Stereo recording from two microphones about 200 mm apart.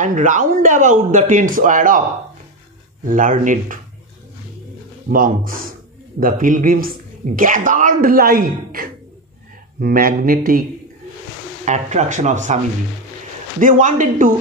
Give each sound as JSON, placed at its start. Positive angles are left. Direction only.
{"t": 0.0, "sound": "speech", "side_deg": -40}
{"t": 3.1, "sound": "speech", "side_deg": -40}
{"t": 5.1, "sound": "a man's voice", "side_deg": -45}
{"t": 11.6, "sound": "speech", "side_deg": -35}
{"t": 13.6, "sound": "speech", "side_deg": -40}